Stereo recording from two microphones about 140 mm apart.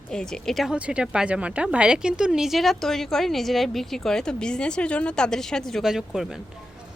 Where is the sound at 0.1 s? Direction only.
5° left (ahead or behind).